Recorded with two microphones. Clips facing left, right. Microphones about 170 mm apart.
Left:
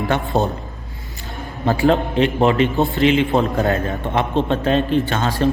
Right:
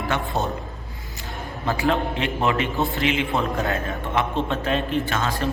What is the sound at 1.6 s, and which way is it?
A man's voice, 30° left (ahead or behind).